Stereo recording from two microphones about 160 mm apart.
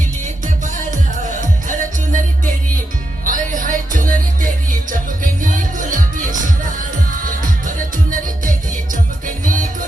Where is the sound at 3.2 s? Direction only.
55° right (ahead or behind).